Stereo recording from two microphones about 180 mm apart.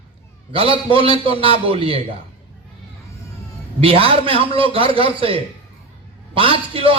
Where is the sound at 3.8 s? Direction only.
30° right (ahead or behind).